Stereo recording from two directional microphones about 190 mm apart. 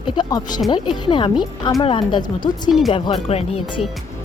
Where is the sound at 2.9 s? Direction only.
30° left (ahead or behind).